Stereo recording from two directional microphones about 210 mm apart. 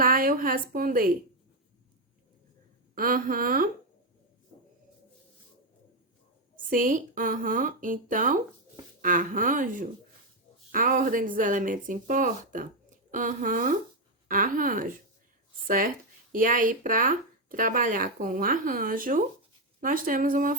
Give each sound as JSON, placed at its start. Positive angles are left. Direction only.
{"t": 0.0, "sound": "a woman's voice", "side_deg": -40}
{"t": 2.9, "sound": "a woman's voice", "side_deg": -40}
{"t": 6.7, "sound": "speech", "side_deg": -40}